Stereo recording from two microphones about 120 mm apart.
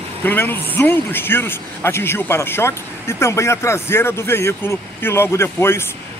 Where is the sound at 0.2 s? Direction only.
15° left (ahead or behind).